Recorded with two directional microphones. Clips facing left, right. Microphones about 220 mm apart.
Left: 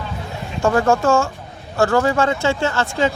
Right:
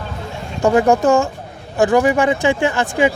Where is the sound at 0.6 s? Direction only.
20° right (ahead or behind).